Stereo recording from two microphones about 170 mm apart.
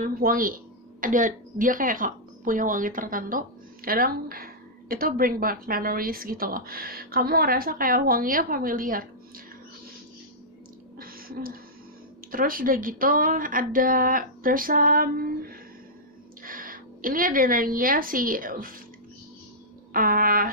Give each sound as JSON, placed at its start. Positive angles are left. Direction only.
{"t": 0.0, "sound": "a woman's voice", "side_deg": -55}
{"t": 11.0, "sound": "a sound", "side_deg": -60}
{"t": 12.3, "sound": "a woman's voice", "side_deg": -55}
{"t": 19.9, "sound": "a woman's voice", "side_deg": -55}